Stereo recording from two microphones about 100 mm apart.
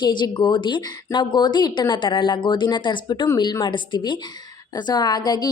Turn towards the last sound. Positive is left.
turn(degrees=45)  # may be behind; listen again after turning